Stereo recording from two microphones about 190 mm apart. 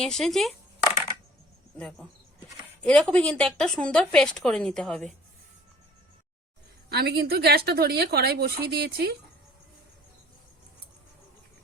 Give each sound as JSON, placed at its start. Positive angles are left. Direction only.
{"t": 0.0, "sound": "speech", "side_deg": 0}
{"t": 1.8, "sound": "speech", "side_deg": 5}
{"t": 6.9, "sound": "a woman's voice", "side_deg": -55}